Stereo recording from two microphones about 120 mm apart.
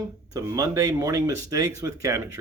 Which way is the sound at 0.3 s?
30° right (ahead or behind).